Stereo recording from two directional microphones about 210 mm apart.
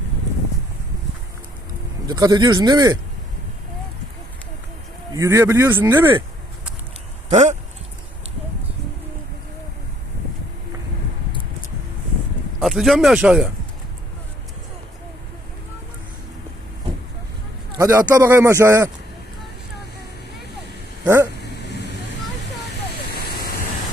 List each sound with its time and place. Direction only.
2.0 s speech: 20° right (ahead or behind)
5.1 s speech: 15° right (ahead or behind)
7.3 s speech: 35° right (ahead or behind)
12.5 s speech: centre (ahead or behind)
17.7 s speech: 15° right (ahead or behind)
21.0 s speech: 10° right (ahead or behind)